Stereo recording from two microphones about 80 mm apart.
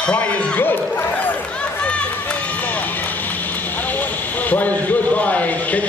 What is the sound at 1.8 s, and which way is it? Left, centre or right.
Run, centre.